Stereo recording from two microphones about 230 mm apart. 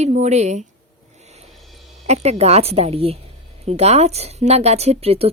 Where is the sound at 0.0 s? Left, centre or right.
Right.